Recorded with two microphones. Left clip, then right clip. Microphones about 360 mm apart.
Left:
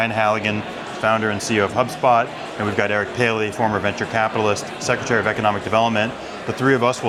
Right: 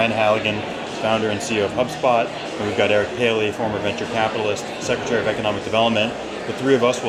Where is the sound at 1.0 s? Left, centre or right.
Left.